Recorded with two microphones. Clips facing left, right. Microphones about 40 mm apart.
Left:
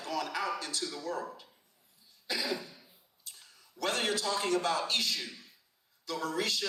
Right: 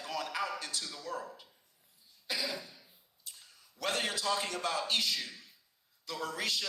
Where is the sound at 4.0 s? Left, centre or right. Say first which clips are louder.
Left 1 dB; left.